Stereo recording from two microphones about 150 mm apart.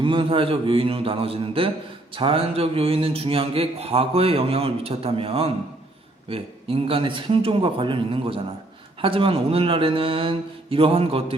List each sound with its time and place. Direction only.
0.0 s a man's voice: 35° right (ahead or behind)